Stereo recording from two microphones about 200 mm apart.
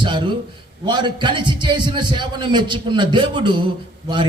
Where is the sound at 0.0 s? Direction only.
25° right (ahead or behind).